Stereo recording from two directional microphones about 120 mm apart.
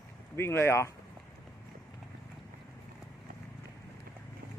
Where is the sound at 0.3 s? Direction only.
20° left (ahead or behind).